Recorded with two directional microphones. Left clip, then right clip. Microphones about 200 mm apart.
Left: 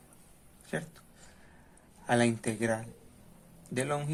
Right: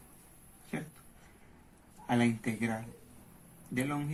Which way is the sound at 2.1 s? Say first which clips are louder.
Left 3 dB; 55° left (ahead or behind).